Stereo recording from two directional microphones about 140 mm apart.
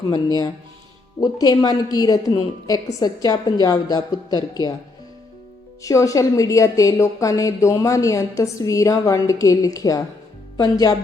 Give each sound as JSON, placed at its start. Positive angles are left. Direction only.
{"t": 0.1, "sound": "a woman's voice", "side_deg": 30}
{"t": 5.8, "sound": "a woman's voice", "side_deg": 20}